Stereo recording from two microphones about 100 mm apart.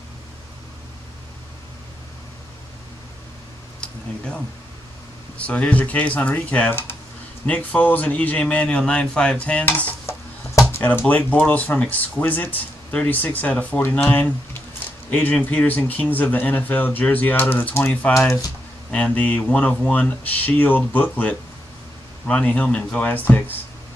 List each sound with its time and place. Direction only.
3.8 s speech: 10° left (ahead or behind)
5.4 s speech: 10° left (ahead or behind)
9.7 s dishes: 25° left (ahead or behind)
10.8 s speech: 20° left (ahead or behind)
18.9 s speech: 10° left (ahead or behind)